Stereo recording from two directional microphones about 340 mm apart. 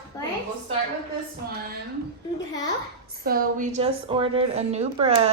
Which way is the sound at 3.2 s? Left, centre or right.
Right.